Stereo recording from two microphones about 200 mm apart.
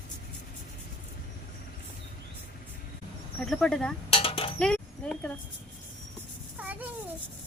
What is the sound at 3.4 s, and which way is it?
Speech, centre (ahead or behind).